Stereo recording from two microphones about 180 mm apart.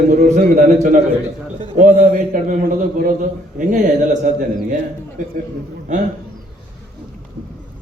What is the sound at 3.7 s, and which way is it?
Speech, 45° right (ahead or behind).